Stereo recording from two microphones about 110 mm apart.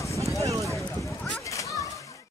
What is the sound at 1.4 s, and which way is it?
Children playing, 30° left (ahead or behind).